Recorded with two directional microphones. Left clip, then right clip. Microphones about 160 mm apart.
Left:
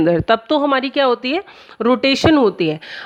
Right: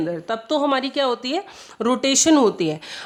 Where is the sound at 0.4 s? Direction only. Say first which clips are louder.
Left 4 dB; 35° left (ahead or behind).